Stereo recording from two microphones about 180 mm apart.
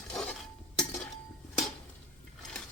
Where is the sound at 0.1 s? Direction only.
5° left (ahead or behind).